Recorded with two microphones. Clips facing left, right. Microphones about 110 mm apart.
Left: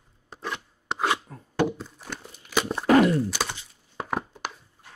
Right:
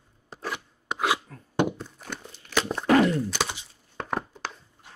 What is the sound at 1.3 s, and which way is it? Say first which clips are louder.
Chopping: left 2 dB; 20° left (ahead or behind).